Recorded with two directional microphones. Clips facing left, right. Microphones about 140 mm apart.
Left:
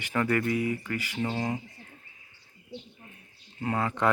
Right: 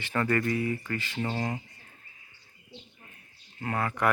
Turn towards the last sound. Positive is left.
turn(degrees=20)  # may be behind; listen again after turning